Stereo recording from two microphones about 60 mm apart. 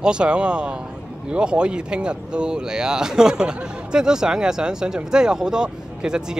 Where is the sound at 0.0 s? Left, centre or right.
Centre.